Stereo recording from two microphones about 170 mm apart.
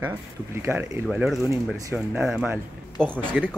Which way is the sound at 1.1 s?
Centre (ahead or behind).